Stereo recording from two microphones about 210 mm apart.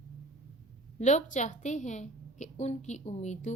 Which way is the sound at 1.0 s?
35° left (ahead or behind).